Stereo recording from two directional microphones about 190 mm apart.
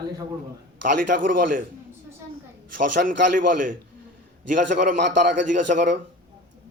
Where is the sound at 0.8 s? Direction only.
45° right (ahead or behind).